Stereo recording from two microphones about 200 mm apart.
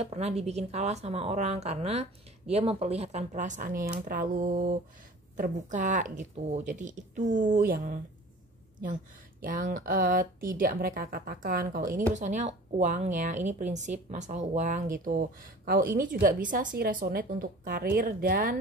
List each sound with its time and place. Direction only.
0.0 s speech: 35° right (ahead or behind)
9.4 s speech: 45° right (ahead or behind)